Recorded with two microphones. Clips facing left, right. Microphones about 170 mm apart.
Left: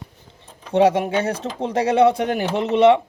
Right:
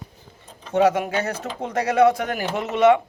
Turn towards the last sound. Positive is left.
turn(degrees=30)  # may be behind; listen again after turning